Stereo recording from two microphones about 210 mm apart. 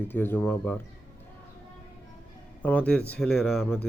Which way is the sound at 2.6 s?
5° left (ahead or behind).